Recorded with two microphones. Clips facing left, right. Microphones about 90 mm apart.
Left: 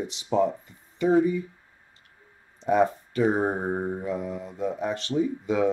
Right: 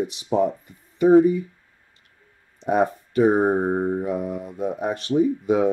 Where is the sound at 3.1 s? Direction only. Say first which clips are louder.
Right 6 dB; 25° right (ahead or behind).